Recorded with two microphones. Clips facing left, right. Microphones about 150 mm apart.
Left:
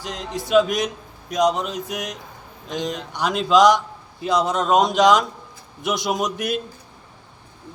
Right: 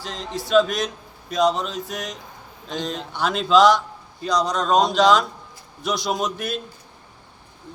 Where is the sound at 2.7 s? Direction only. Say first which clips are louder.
Left 1 dB; 15° left (ahead or behind).